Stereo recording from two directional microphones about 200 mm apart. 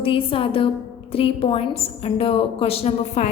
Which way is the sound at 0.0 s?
25° left (ahead or behind).